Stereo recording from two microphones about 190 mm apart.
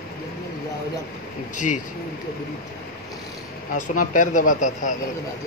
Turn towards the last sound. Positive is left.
turn(degrees=40)  # may be behind; listen again after turning